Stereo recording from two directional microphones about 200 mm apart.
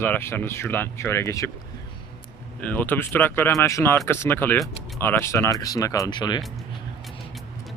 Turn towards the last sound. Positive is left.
turn(degrees=20)  # may be behind; listen again after turning